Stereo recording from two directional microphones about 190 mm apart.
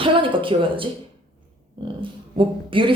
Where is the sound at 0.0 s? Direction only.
25° right (ahead or behind).